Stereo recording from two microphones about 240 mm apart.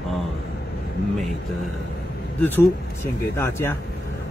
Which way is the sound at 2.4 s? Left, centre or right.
Centre.